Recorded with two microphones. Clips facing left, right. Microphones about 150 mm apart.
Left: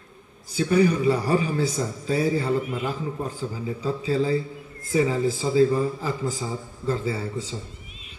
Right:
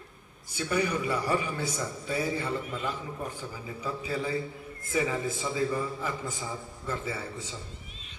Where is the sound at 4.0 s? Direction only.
30° left (ahead or behind).